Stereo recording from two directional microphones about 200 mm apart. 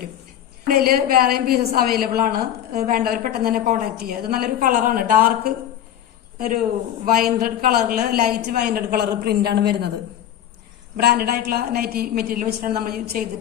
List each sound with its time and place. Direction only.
0.7 s a woman's voice: 50° right (ahead or behind)
7.0 s a woman's voice: 45° right (ahead or behind)
10.9 s a woman's voice: 50° right (ahead or behind)